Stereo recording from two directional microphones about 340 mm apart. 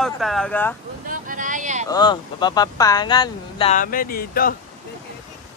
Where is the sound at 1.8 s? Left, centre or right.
Centre.